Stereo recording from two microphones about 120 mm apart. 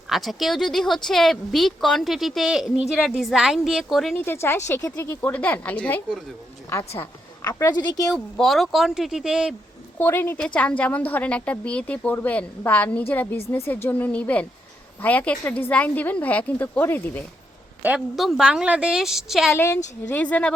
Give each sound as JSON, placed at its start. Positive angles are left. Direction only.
{"t": 0.1, "sound": "speech", "side_deg": 0}
{"t": 4.3, "sound": "a woman's voice", "side_deg": 20}
{"t": 7.4, "sound": "speech", "side_deg": 30}
{"t": 8.1, "sound": "speech", "side_deg": 0}
{"t": 10.0, "sound": "a woman's voice", "side_deg": 20}
{"t": 18.2, "sound": "speech", "side_deg": 0}
{"t": 19.5, "sound": "a woman's voice", "side_deg": 20}